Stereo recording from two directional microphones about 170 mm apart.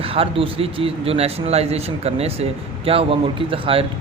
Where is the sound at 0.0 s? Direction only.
35° right (ahead or behind).